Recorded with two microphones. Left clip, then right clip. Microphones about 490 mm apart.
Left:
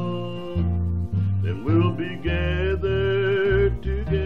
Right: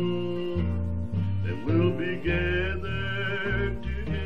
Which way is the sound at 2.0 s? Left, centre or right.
Left.